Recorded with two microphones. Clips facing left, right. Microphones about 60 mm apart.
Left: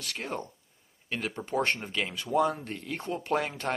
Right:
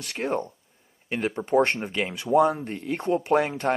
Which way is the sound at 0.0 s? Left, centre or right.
Right.